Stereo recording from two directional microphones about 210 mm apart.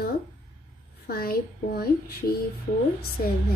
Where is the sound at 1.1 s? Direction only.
45° left (ahead or behind).